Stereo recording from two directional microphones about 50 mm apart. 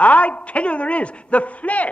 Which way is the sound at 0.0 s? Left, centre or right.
Left.